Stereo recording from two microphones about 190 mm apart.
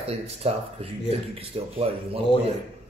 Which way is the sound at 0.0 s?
30° right (ahead or behind).